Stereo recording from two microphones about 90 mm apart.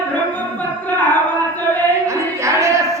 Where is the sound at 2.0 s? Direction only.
35° right (ahead or behind).